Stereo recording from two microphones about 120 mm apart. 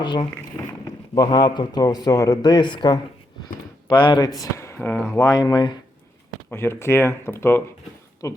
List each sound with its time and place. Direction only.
0.0 s speech: 40° left (ahead or behind)
0.6 s a sound: 20° left (ahead or behind)
1.1 s speech: 35° left (ahead or behind)
4.4 s speech: 25° left (ahead or behind)
5.2 s speech: 30° left (ahead or behind)
6.5 s speech: 20° left (ahead or behind)